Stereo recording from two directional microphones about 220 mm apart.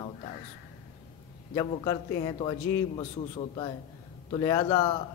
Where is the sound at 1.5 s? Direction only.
15° left (ahead or behind).